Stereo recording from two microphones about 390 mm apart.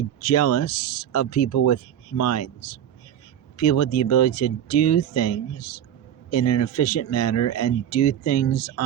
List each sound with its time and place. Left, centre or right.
0.2 s speech: left
3.6 s speech: left